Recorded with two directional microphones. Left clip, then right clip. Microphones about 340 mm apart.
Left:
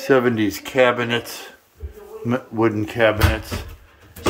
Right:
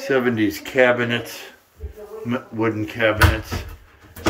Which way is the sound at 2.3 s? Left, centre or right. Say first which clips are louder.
Left 3 dB; centre.